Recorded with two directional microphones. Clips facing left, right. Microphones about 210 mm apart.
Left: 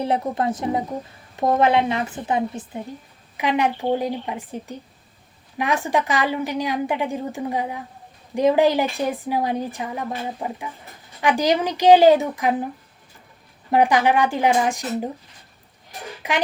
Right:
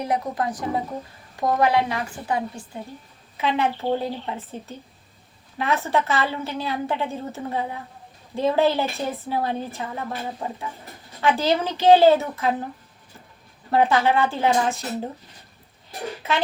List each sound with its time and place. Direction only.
0.0 s a woman's voice: 25° left (ahead or behind)
13.7 s a woman's voice: 15° left (ahead or behind)
16.2 s a woman's voice: 15° left (ahead or behind)